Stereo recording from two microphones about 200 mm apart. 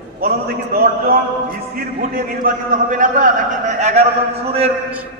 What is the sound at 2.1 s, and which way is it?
A man's voice, 40° right (ahead or behind).